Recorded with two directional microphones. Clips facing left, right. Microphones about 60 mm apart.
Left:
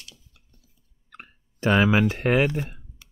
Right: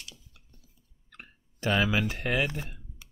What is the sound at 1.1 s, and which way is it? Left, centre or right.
Clicking, left.